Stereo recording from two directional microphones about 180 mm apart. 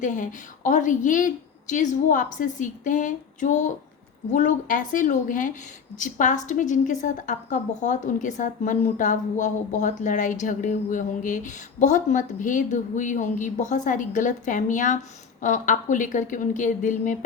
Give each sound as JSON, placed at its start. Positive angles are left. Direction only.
{"t": 0.0, "sound": "a woman's voice", "side_deg": 45}